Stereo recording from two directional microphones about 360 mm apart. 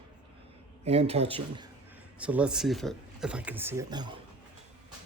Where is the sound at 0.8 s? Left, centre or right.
Centre.